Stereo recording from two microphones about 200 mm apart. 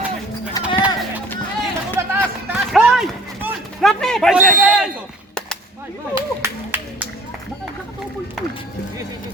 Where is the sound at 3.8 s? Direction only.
Centre (ahead or behind).